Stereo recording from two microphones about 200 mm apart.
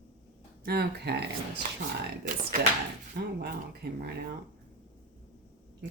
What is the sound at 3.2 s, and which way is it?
Speech, 50° right (ahead or behind).